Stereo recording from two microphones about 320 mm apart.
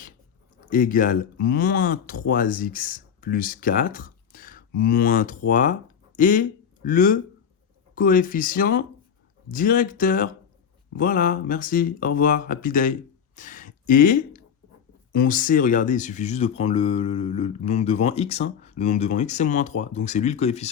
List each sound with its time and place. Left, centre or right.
0.7 s speech: left